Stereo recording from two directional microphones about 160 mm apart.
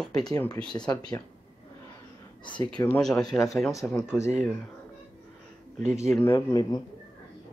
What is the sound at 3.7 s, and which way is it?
Speech, 20° left (ahead or behind).